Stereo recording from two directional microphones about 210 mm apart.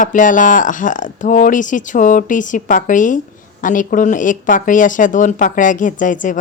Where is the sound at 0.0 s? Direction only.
40° left (ahead or behind).